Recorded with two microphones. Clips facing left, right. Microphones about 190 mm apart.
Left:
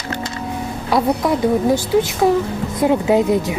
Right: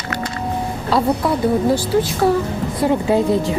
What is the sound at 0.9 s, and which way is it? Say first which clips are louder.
Speech: left 1 dB; 15° left (ahead or behind).